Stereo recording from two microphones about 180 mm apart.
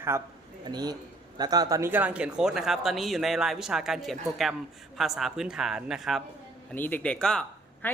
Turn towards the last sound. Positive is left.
turn(degrees=5)  # may be behind; listen again after turning